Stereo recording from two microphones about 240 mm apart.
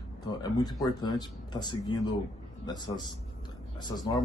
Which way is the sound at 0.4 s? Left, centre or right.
Centre.